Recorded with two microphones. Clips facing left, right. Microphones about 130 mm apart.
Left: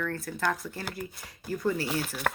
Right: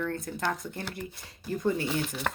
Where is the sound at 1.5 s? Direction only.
20° right (ahead or behind).